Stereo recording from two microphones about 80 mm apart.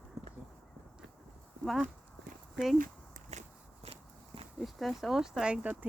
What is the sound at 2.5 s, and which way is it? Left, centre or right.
Speech, centre.